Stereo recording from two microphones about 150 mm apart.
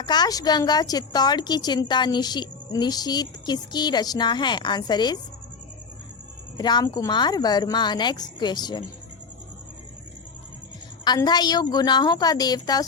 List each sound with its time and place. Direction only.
0.0 s a woman's voice: 30° left (ahead or behind)
6.6 s a woman's voice: 30° left (ahead or behind)
11.0 s a woman's voice: 30° left (ahead or behind)